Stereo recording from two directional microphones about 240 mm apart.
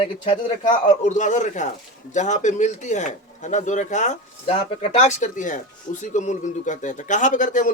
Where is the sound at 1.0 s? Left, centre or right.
Left.